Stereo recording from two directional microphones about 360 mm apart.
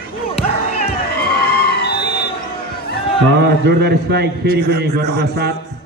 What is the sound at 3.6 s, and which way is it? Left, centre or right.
A man's voice, right.